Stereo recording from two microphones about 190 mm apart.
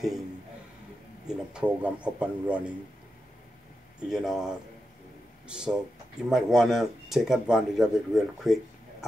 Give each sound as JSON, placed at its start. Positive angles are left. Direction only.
{"t": 1.2, "sound": "speech", "side_deg": -5}
{"t": 4.1, "sound": "speech", "side_deg": 0}
{"t": 5.5, "sound": "speech", "side_deg": -5}